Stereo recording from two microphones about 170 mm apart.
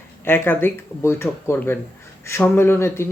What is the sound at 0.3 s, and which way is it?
Speech, 10° left (ahead or behind).